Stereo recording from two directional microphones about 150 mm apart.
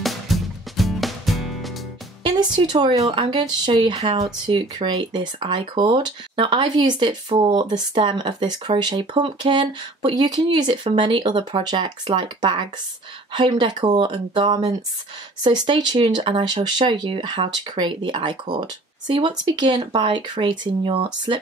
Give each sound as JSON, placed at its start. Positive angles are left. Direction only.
{"t": 0.0, "sound": "music", "side_deg": 0}
{"t": 2.2, "sound": "speech", "side_deg": -30}
{"t": 3.9, "sound": "speech", "side_deg": -40}
{"t": 4.2, "sound": "speech", "side_deg": -30}